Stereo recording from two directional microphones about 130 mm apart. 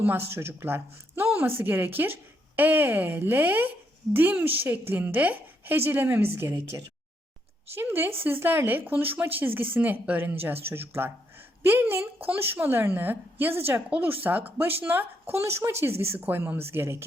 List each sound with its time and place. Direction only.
0.3 s a woman's voice: 20° right (ahead or behind)